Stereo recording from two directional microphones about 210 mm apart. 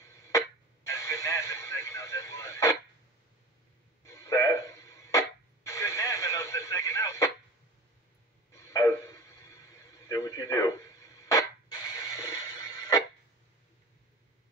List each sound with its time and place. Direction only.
0.0 s music: 15° left (ahead or behind)
0.8 s radio: 15° left (ahead or behind)
4.0 s radio: 15° left (ahead or behind)
8.5 s a sound: 15° left (ahead or behind)